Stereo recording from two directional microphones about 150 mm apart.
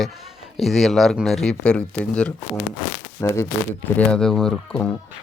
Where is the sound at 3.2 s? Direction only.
20° left (ahead or behind).